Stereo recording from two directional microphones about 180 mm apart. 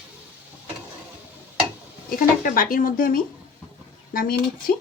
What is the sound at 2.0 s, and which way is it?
Speech, 50° left (ahead or behind).